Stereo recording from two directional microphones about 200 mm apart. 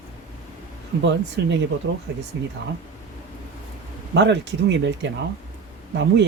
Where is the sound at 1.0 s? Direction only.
65° right (ahead or behind).